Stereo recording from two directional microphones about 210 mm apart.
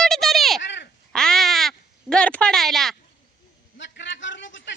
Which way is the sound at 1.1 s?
Centre (ahead or behind).